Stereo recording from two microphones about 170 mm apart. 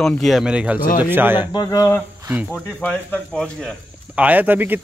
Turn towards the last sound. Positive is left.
turn(degrees=-10)  # may be behind; listen again after turning